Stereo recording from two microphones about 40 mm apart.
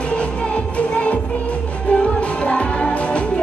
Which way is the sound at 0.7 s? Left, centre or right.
Left.